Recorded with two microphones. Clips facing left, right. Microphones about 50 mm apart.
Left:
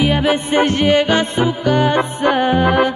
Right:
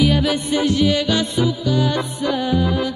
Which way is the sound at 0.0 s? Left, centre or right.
Left.